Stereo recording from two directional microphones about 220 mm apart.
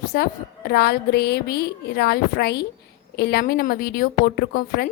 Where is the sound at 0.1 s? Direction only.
45° left (ahead or behind).